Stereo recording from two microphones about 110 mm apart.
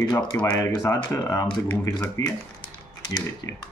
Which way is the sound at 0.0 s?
35° left (ahead or behind).